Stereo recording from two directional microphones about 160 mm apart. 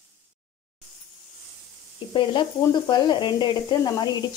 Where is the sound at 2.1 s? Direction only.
30° left (ahead or behind).